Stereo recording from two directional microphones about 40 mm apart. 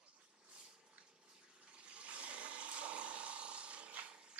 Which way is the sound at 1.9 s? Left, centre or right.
Right.